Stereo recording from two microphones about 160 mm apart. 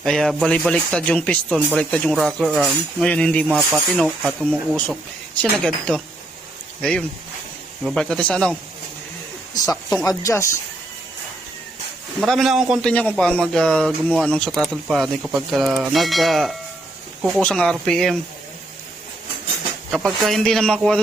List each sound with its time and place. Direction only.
0.0 s speech: 5° left (ahead or behind)
7.9 s speech: 5° left (ahead or behind)
10.1 s speech: 20° left (ahead or behind)
12.2 s speech: centre (ahead or behind)
12.9 s speech: 10° left (ahead or behind)
19.9 s speech: centre (ahead or behind)